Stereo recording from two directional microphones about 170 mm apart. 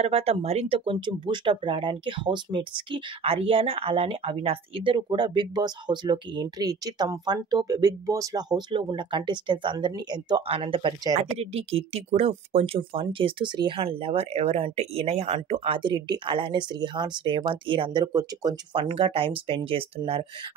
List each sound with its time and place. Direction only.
0.0 s speech: 35° right (ahead or behind)